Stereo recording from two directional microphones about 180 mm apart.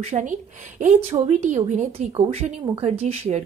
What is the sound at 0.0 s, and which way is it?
A woman's voice, 40° right (ahead or behind).